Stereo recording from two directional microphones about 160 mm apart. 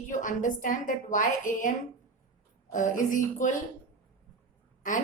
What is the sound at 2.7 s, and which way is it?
Speech, 55° left (ahead or behind).